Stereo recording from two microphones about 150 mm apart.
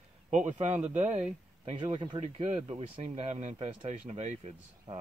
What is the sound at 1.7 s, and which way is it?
Speech, 30° right (ahead or behind).